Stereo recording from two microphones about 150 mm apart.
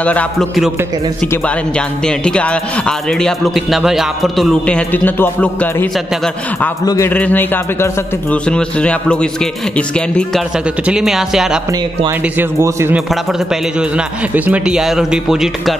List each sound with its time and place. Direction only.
0.0 s speech: 10° left (ahead or behind)
7.1 s a man's voice: 10° left (ahead or behind)
12.1 s speech: 15° right (ahead or behind)
12.9 s a man's voice: 5° right (ahead or behind)